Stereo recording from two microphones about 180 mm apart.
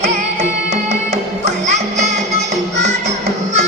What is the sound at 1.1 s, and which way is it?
Music, 40° right (ahead or behind).